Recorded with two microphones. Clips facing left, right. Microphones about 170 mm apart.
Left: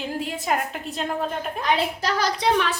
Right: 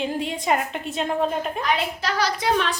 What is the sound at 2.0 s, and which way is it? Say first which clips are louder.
Speech: even; 45° left (ahead or behind).